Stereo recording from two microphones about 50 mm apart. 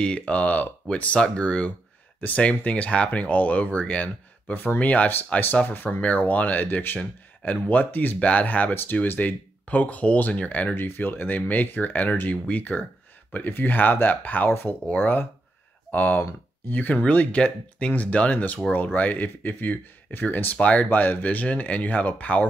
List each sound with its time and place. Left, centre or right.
0.0 s speech: left
4.6 s speech: left
7.0 s speech: left
10.8 s speech: left
14.5 s speech: left
14.9 s speech: left
20.5 s speech: left